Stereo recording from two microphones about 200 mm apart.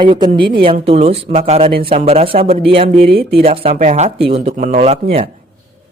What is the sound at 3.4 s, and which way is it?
Speech, 30° right (ahead or behind).